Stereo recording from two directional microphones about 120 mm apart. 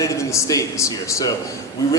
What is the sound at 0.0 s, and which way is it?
A man's voice, 25° left (ahead or behind).